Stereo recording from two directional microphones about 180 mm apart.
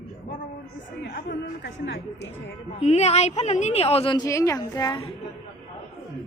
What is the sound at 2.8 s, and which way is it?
A woman's voice, 35° left (ahead or behind).